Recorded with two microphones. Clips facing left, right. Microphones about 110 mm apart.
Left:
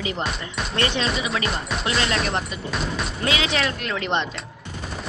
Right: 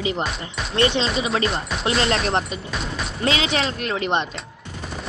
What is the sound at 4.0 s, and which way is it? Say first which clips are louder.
Speech: right 2 dB; 15° right (ahead or behind).